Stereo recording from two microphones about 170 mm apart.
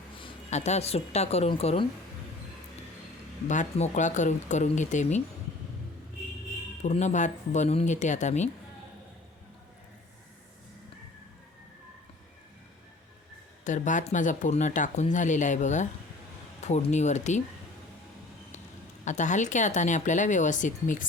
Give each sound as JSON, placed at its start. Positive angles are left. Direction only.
{"t": 0.2, "sound": "speech", "side_deg": 40}
{"t": 3.5, "sound": "speech", "side_deg": 45}
{"t": 6.8, "sound": "speech", "side_deg": 40}
{"t": 13.7, "sound": "speech", "side_deg": 50}
{"t": 19.0, "sound": "speech", "side_deg": 45}